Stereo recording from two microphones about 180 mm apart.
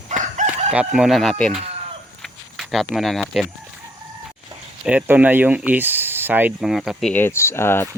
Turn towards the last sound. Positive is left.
turn(degrees=15)  # may be behind; listen again after turning